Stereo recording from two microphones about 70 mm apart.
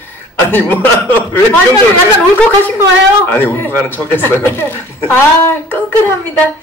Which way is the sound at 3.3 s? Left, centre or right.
Left.